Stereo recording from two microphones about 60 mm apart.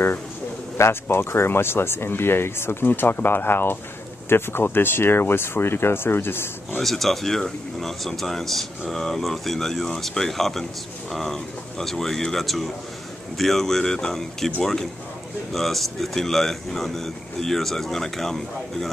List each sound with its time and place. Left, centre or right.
1.0 s speech: left
6.8 s speech: centre